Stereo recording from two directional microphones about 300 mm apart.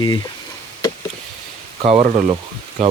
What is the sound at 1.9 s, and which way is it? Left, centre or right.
Speech, right.